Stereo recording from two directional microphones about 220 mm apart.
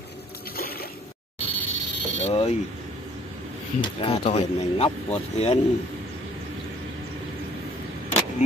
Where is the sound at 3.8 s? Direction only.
25° left (ahead or behind).